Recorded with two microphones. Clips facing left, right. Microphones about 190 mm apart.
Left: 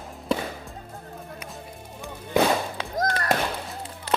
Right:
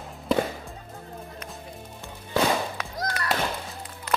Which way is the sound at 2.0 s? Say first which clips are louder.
Left 3 dB; 15° left (ahead or behind).